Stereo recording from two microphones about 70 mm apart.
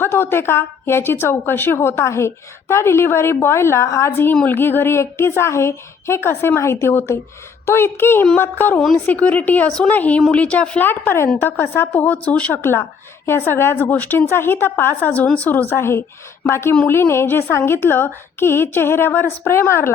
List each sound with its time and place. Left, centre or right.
0.0 s a woman's voice: left; by 10.8 s centre
10.8 s a woman's voice: left
11.9 s a woman's voice: left
13.2 s a woman's voice: left
13.9 s a woman's voice: left